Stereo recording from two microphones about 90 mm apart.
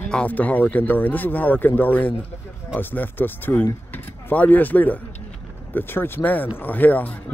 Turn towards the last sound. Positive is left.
turn(degrees=20)  # may be behind; listen again after turning